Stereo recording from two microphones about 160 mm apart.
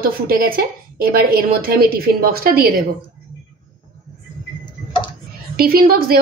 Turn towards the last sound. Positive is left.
turn(degrees=-70)  # may be behind; listen again after turning